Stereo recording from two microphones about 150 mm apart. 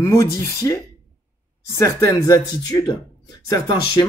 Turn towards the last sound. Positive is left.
turn(degrees=25)  # may be behind; listen again after turning